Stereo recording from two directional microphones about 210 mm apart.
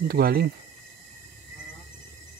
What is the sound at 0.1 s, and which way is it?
Speech, 45° right (ahead or behind).